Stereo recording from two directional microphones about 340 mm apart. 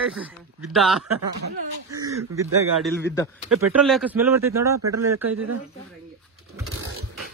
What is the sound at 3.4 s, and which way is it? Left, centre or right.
Speech, right.